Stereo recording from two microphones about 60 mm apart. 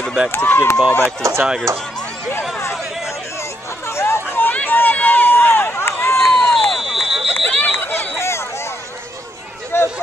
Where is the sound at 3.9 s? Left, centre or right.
Left.